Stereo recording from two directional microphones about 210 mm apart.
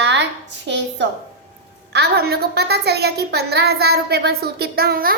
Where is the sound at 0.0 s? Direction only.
55° right (ahead or behind).